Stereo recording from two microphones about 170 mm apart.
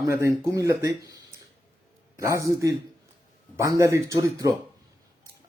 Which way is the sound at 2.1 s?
20° right (ahead or behind).